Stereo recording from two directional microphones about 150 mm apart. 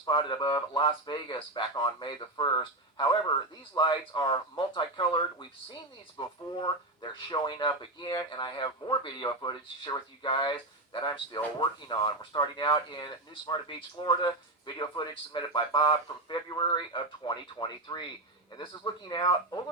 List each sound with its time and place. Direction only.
0.0 s speech: 30° left (ahead or behind)